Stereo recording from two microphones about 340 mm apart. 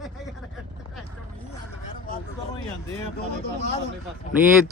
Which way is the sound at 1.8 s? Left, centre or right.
Left.